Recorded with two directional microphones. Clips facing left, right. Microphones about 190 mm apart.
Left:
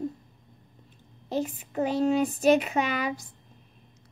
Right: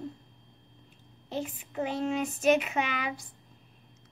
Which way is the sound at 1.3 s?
40° left (ahead or behind).